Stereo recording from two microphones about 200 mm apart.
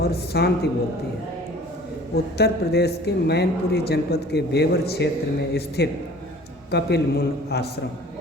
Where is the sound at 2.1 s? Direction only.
55° left (ahead or behind).